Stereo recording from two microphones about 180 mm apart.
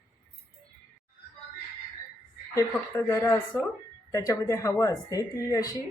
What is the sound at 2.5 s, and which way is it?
A woman's voice, 15° left (ahead or behind).